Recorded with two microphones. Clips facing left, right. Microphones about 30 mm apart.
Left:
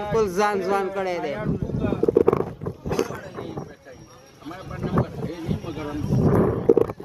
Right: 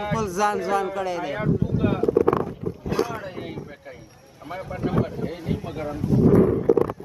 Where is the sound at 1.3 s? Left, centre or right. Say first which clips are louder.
Right 3 dB; right.